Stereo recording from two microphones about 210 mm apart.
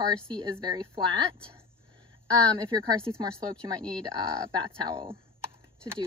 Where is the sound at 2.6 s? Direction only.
20° right (ahead or behind).